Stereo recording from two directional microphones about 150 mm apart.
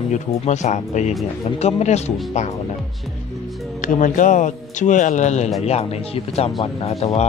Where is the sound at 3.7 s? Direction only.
60° left (ahead or behind).